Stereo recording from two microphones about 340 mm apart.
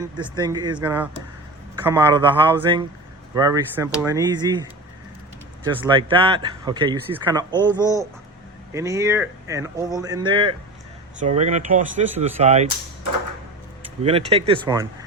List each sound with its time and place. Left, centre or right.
0.0 s speech: centre
5.6 s speech: centre
7.5 s a man's voice: centre
8.7 s speech: centre
14.0 s speech: centre